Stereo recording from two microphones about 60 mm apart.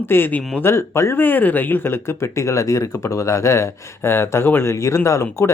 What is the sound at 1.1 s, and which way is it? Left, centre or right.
Speech, left.